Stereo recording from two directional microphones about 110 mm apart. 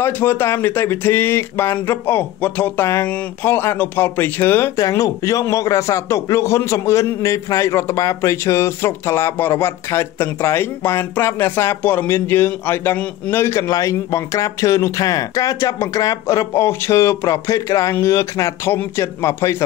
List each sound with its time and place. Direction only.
0.0 s a man's voice: 20° left (ahead or behind)